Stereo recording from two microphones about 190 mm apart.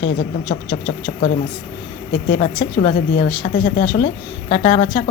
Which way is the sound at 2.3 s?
40° left (ahead or behind).